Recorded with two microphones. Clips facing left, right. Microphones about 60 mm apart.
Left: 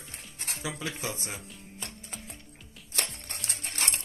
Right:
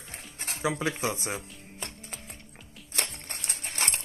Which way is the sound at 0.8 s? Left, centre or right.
Centre.